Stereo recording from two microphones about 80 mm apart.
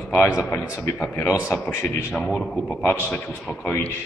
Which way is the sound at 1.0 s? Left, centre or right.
Left.